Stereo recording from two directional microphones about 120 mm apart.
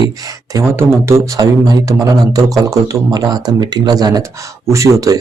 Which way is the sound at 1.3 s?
35° right (ahead or behind).